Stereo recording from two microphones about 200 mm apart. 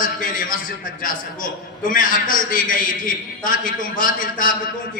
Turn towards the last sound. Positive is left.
turn(degrees=45)  # may be behind; listen again after turning